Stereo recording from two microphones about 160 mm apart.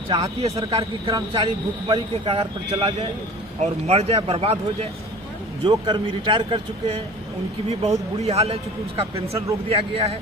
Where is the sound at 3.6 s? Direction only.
40° right (ahead or behind).